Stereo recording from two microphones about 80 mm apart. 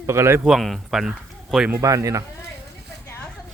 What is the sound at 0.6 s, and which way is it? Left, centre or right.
Speech, centre.